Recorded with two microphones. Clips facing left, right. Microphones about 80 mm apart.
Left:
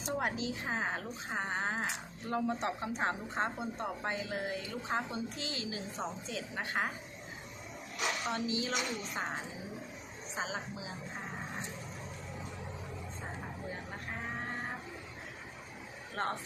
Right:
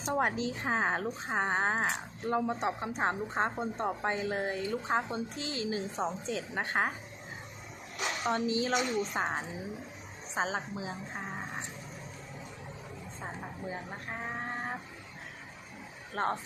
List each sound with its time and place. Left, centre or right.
0.1 s speech: right
2.3 s a woman's voice: right
8.3 s a woman's voice: right
16.1 s speech: right